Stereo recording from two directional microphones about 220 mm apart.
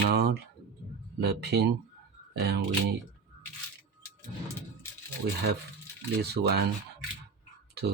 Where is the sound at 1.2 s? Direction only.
50° right (ahead or behind).